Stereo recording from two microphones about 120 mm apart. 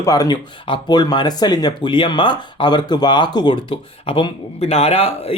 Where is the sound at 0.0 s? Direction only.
30° left (ahead or behind); by 4.3 s 45° left (ahead or behind).